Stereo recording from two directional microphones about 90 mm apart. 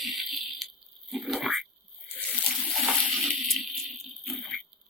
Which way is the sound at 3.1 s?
Centre (ahead or behind).